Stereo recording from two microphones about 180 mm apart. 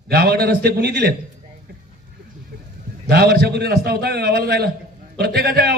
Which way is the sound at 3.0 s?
65° right (ahead or behind).